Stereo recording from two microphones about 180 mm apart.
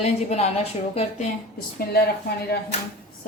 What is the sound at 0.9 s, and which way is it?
Speech, 35° left (ahead or behind).